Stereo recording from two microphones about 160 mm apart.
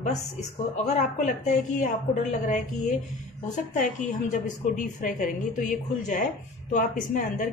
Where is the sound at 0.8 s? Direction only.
50° left (ahead or behind).